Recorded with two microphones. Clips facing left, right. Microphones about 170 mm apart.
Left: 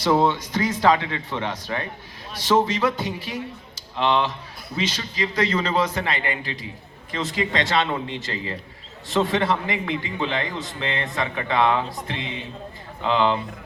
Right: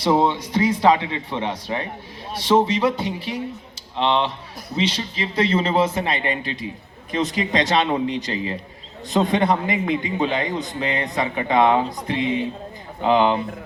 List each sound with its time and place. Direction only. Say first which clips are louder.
0.0 s a man's voice: right 1 dB; 20° right (ahead or behind)